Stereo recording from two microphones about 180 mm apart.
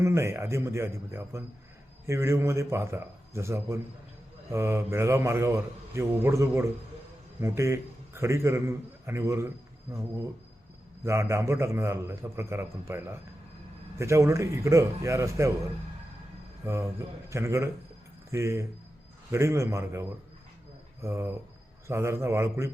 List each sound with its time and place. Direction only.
0.0 s a man's voice: 15° right (ahead or behind)
16.6 s a man's voice: 15° right (ahead or behind)